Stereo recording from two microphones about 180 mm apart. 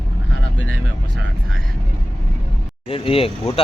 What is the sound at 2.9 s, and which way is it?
Speech, 30° left (ahead or behind).